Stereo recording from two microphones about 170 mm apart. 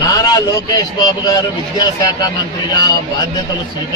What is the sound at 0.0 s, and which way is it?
A man's voice, 20° left (ahead or behind).